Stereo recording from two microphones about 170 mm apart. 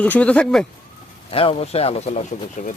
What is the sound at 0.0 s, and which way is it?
Speech, 5° left (ahead or behind).